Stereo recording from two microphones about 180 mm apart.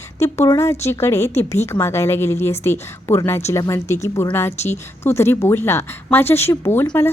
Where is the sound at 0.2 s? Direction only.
15° left (ahead or behind).